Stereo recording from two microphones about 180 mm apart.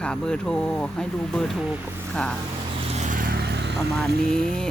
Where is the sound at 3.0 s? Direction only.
45° right (ahead or behind); by 3.8 s 65° right (ahead or behind).